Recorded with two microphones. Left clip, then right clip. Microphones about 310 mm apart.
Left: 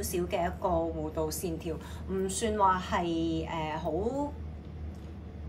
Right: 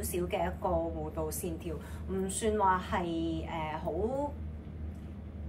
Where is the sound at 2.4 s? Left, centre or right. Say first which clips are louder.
Left 2 dB; centre.